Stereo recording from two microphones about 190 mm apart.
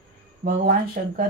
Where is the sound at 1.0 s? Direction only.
45° right (ahead or behind).